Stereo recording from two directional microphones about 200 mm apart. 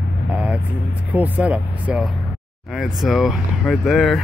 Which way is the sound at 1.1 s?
10° right (ahead or behind).